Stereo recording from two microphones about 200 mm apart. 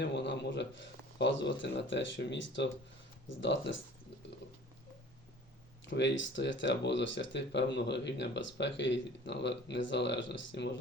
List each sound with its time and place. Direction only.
0.0 s speech: 60° left (ahead or behind)
5.8 s speech: 65° left (ahead or behind)